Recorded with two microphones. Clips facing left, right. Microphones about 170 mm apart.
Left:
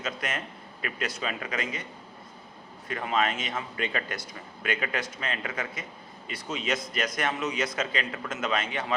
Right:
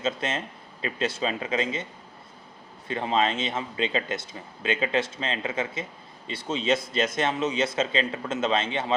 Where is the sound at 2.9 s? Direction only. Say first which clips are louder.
Right 3 dB; 25° right (ahead or behind).